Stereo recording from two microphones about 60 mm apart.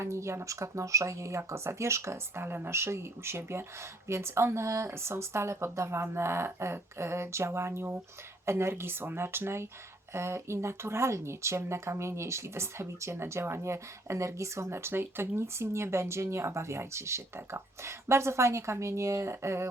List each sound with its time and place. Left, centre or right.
0.0 s speech: right